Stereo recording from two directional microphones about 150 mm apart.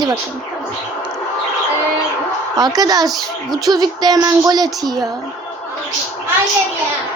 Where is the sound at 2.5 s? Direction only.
25° right (ahead or behind).